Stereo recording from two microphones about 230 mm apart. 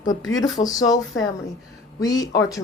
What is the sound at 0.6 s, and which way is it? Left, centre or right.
Speech, centre.